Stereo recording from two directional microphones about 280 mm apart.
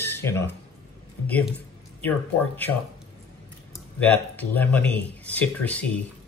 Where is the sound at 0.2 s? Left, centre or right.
Centre.